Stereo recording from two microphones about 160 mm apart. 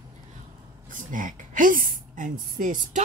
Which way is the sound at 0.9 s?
55° right (ahead or behind).